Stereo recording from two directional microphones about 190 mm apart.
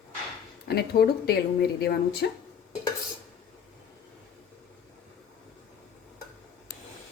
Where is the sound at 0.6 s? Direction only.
55° left (ahead or behind).